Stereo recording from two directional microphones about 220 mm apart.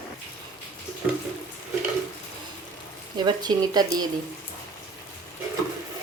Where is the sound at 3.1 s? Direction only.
20° right (ahead or behind).